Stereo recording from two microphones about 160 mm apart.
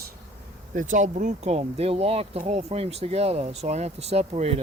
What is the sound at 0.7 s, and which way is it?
Speech, 50° right (ahead or behind).